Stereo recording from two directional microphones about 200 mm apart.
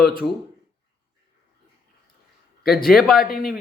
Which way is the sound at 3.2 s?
45° left (ahead or behind).